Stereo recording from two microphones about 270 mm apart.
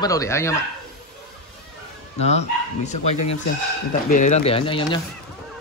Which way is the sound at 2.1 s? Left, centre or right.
Left.